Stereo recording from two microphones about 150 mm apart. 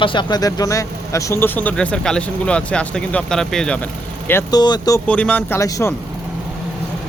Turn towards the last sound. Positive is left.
turn(degrees=20)  # may be behind; listen again after turning